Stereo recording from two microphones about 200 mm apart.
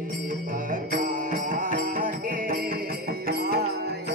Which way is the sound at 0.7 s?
40° right (ahead or behind).